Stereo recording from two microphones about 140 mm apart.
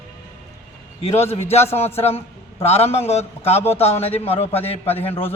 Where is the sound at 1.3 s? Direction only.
50° left (ahead or behind).